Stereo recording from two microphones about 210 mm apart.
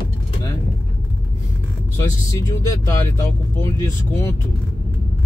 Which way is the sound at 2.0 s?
15° left (ahead or behind).